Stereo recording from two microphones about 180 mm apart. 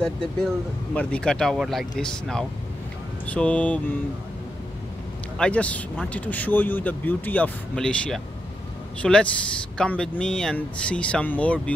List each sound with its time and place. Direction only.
0.9 s speech: 5° left (ahead or behind)
5.4 s speech: 5° left (ahead or behind)